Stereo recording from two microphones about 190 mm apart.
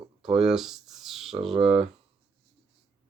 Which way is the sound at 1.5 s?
30° right (ahead or behind).